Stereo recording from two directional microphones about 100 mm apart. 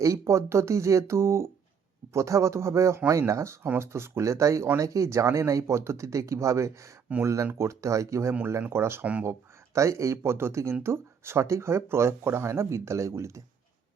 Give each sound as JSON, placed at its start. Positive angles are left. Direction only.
{"t": 0.0, "sound": "speech", "side_deg": -30}
{"t": 9.7, "sound": "speech", "side_deg": -30}